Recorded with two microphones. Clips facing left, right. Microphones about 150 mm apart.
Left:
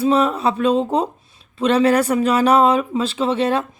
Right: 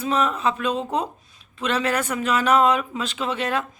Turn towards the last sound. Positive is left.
turn(degrees=30)  # may be behind; listen again after turning